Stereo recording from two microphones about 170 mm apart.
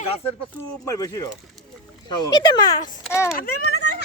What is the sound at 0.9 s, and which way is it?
Speech, 20° left (ahead or behind).